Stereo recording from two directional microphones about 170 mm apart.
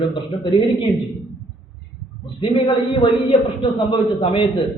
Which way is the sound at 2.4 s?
30° left (ahead or behind).